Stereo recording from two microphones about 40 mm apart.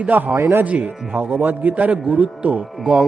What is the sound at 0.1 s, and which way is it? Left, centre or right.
Mantra, right.